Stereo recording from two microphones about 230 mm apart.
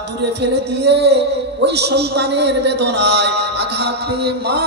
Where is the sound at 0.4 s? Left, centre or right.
Right.